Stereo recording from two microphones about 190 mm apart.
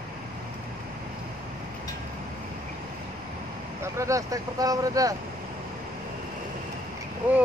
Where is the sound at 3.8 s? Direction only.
15° right (ahead or behind).